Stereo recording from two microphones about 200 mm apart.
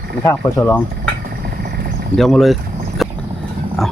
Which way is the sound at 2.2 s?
Centre (ahead or behind).